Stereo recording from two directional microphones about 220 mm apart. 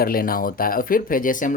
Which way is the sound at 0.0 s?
40° left (ahead or behind).